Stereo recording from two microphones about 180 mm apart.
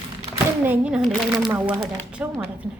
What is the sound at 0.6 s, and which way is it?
A woman's voice, 10° right (ahead or behind).